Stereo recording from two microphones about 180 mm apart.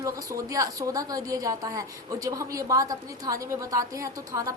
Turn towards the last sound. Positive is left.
turn(degrees=-15)  # may be behind; listen again after turning